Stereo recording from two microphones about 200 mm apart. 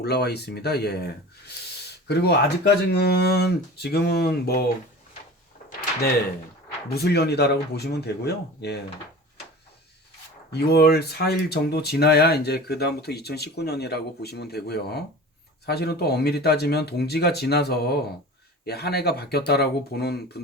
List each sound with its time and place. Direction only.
0.0 s speech: 55° left (ahead or behind)
6.8 s speech: 55° left (ahead or behind)
10.5 s speech: 55° left (ahead or behind)